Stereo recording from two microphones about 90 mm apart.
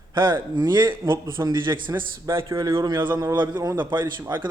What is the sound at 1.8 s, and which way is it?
Speech, 60° right (ahead or behind).